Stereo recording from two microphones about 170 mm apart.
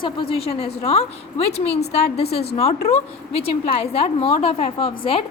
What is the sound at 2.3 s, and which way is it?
A woman's voice, 35° left (ahead or behind).